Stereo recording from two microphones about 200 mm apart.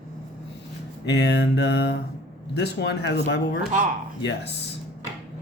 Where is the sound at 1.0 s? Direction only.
55° left (ahead or behind).